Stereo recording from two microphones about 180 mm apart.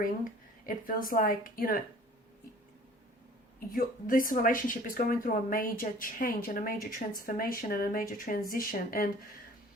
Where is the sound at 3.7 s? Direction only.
50° left (ahead or behind).